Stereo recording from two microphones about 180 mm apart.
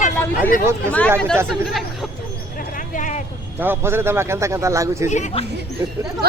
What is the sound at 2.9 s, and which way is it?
Vehicle, 45° left (ahead or behind).